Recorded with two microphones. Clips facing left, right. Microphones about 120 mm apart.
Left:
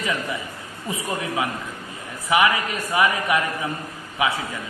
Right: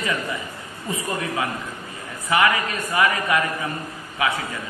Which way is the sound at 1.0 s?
15° left (ahead or behind).